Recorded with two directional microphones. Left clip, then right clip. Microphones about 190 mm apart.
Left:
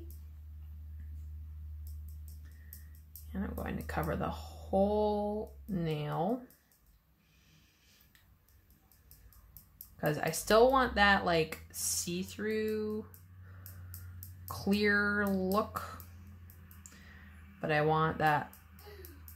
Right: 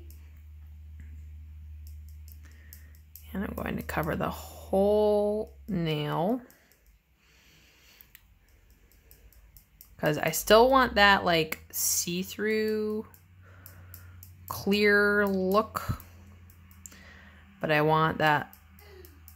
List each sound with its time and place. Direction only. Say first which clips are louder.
3.3 s speech: right 6 dB; 40° right (ahead or behind)
9.9 s speech: right 6 dB; 35° right (ahead or behind)
14.5 s speech: right 7 dB; 35° right (ahead or behind)
17.6 s speech: right 6 dB; 35° right (ahead or behind)